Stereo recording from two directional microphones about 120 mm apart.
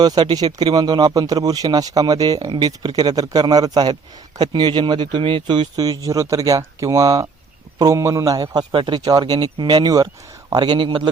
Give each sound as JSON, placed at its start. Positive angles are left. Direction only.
{"t": 0.0, "sound": "speech", "side_deg": -35}